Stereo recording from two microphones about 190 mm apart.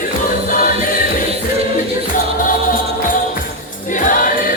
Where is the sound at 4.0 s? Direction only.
45° left (ahead or behind).